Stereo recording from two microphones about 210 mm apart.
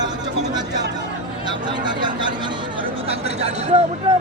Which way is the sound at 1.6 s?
20° right (ahead or behind).